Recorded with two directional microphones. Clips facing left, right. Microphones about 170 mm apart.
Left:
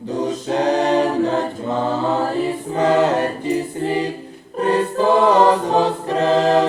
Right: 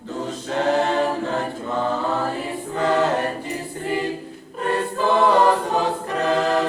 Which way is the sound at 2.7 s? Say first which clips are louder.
Left 4 dB; 20° left (ahead or behind).